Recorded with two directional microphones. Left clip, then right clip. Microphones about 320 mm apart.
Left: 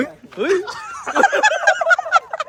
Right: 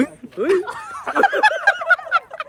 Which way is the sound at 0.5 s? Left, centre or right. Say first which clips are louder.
Right 1 dB; centre.